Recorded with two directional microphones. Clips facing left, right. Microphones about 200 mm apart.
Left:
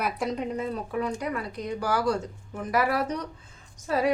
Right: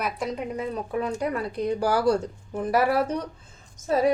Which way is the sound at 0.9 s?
25° right (ahead or behind).